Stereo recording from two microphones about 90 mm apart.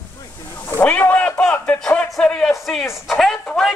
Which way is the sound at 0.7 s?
20° left (ahead or behind).